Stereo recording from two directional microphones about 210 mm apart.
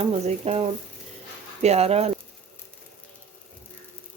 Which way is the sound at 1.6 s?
30° right (ahead or behind).